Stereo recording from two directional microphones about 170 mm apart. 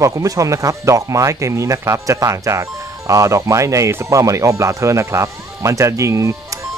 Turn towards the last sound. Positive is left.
turn(degrees=-20)  # may be behind; listen again after turning